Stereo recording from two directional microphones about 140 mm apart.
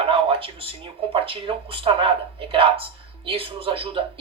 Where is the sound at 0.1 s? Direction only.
40° right (ahead or behind).